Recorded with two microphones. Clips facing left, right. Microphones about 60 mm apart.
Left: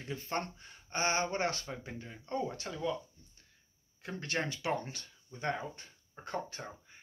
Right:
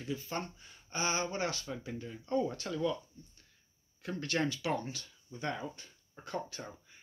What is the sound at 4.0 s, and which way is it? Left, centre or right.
Speech, left.